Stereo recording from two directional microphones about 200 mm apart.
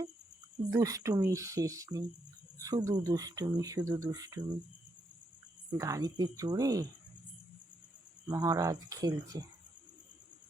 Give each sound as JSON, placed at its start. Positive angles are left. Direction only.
{"t": 0.7, "sound": "speech", "side_deg": -15}
{"t": 5.7, "sound": "speech", "side_deg": -15}
{"t": 8.3, "sound": "speech", "side_deg": -20}